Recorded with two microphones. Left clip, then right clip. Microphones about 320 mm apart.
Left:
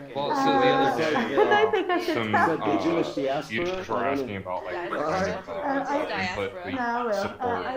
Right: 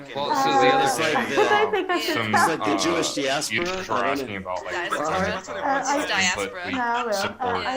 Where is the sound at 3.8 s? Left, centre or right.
Right.